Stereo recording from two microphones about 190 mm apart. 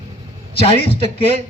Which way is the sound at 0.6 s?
30° left (ahead or behind).